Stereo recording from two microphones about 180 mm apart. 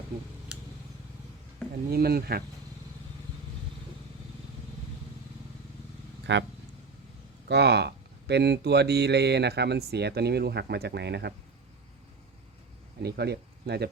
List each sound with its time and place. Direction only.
1.9 s speech: 55° right (ahead or behind)
6.3 s speech: 80° right
7.4 s speech: 65° right (ahead or behind)
13.0 s speech: 65° right (ahead or behind)